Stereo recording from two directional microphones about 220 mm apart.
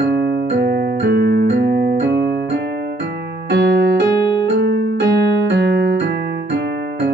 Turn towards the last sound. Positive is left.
turn(degrees=-50)  # may be behind; listen again after turning